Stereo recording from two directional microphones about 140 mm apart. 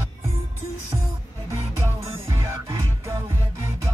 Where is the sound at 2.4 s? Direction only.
20° right (ahead or behind).